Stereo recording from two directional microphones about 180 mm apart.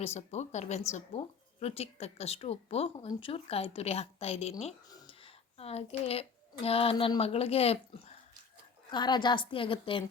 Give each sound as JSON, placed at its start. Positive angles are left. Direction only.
{"t": 0.0, "sound": "speech", "side_deg": 40}
{"t": 5.5, "sound": "speech", "side_deg": 35}
{"t": 8.9, "sound": "a woman's voice", "side_deg": 25}